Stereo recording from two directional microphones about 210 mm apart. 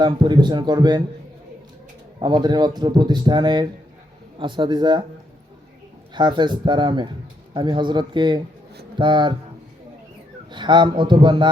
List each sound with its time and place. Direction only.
0.0 s a man's voice: 20° right (ahead or behind)
2.2 s a man's voice: 20° right (ahead or behind)
6.1 s a man's voice: 20° right (ahead or behind)
10.5 s a man's voice: 20° right (ahead or behind)